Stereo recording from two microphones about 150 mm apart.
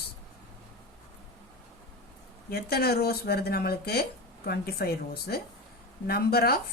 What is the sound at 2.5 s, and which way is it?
Speech, 90° left.